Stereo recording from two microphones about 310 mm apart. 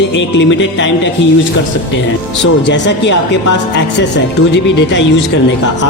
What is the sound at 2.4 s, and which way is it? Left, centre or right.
Speech, left.